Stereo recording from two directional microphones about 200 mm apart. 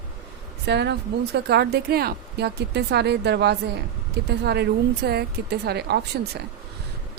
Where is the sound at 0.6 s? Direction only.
55° right (ahead or behind).